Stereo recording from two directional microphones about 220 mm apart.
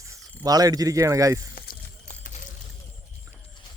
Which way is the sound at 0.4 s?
15° right (ahead or behind).